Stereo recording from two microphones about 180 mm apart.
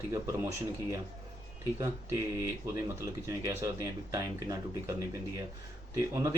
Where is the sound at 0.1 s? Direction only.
15° right (ahead or behind).